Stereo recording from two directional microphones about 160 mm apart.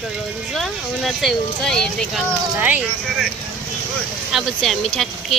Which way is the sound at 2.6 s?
10° right (ahead or behind).